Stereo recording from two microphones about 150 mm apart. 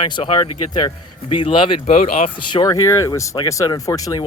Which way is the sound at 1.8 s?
50° left (ahead or behind).